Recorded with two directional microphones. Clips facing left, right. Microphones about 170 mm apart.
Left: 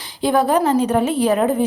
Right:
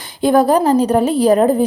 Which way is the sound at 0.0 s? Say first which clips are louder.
Right 5 dB; 50° right (ahead or behind).